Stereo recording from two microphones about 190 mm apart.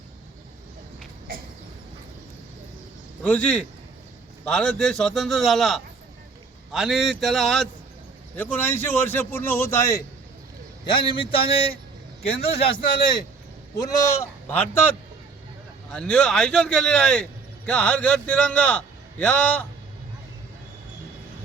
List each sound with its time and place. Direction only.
3.2 s a man's voice: 5° left (ahead or behind)
10.9 s a man's voice: 25° left (ahead or behind)
12.7 s a man's voice: 25° left (ahead or behind); by 19.6 s 5° left (ahead or behind)